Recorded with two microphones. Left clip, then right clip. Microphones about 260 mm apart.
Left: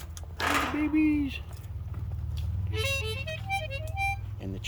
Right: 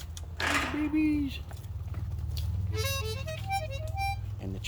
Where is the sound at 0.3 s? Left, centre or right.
Left.